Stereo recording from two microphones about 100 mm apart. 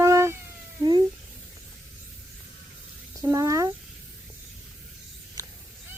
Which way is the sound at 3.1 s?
35° right (ahead or behind).